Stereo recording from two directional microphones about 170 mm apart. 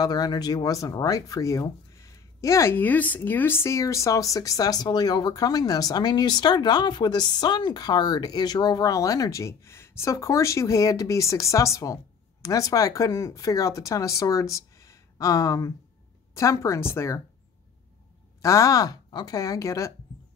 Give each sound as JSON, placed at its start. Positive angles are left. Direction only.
{"t": 0.0, "sound": "speech", "side_deg": 25}
{"t": 18.4, "sound": "speech", "side_deg": 20}